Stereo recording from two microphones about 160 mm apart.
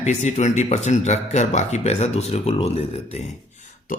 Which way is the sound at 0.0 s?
45° left (ahead or behind).